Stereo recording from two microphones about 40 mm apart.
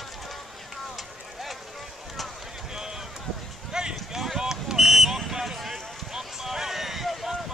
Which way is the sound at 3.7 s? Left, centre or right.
Centre.